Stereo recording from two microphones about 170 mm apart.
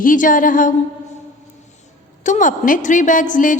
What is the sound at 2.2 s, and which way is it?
A woman's voice, 50° left (ahead or behind).